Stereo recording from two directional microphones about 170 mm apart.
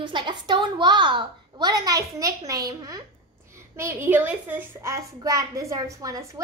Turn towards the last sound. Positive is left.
turn(degrees=-20)  # may be behind; listen again after turning